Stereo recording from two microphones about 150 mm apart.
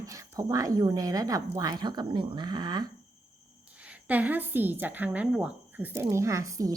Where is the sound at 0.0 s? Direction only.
20° right (ahead or behind).